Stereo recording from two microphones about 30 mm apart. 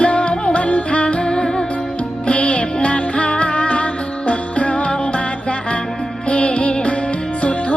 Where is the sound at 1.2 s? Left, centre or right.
Left.